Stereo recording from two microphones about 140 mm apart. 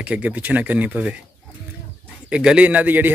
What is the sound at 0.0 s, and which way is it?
Speech, 10° right (ahead or behind).